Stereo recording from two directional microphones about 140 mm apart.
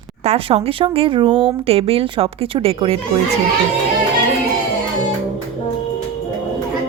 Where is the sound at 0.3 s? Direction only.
45° right (ahead or behind).